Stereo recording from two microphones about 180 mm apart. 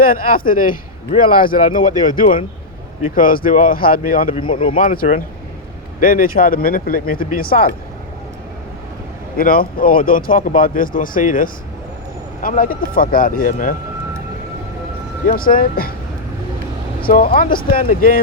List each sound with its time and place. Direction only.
0.0 s a man's voice: 55° left (ahead or behind)
9.4 s a man's voice: 55° left (ahead or behind)
15.3 s a man's voice: 55° left (ahead or behind)
17.1 s a man's voice: 50° left (ahead or behind)